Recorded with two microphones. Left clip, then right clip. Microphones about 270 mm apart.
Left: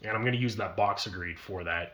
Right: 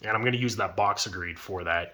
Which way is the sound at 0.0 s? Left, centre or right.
Centre.